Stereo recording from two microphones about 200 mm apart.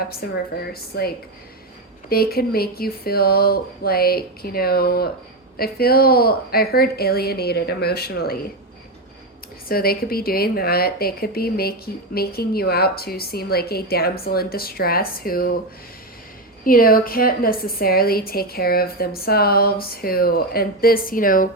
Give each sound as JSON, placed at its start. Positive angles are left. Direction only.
{"t": 0.2, "sound": "a woman's voice", "side_deg": 50}
{"t": 9.6, "sound": "a woman's voice", "side_deg": 50}
{"t": 16.6, "sound": "a woman's voice", "side_deg": 45}